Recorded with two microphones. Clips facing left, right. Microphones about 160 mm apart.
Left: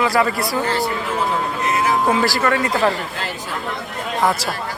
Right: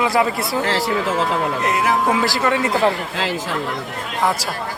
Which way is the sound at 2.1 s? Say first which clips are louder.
Left 1 dB; 20° right (ahead or behind).